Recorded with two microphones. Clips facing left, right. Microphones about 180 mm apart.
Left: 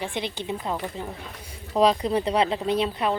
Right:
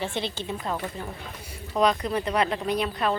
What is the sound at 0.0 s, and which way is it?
A woman's voice, 15° left (ahead or behind).